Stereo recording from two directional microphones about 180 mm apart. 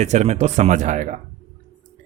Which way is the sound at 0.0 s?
40° right (ahead or behind).